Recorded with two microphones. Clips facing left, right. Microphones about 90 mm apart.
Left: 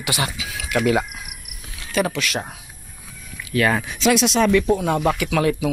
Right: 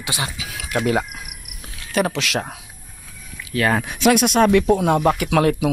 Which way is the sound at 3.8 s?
55° right (ahead or behind).